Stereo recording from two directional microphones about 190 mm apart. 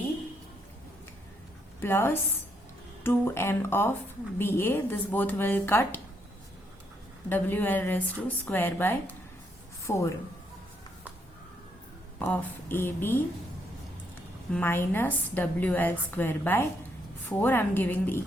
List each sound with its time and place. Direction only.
1.8 s a woman's voice: 15° left (ahead or behind)
7.3 s a woman's voice: 10° left (ahead or behind)
12.2 s a woman's voice: 10° left (ahead or behind)
14.5 s a woman's voice: 10° left (ahead or behind)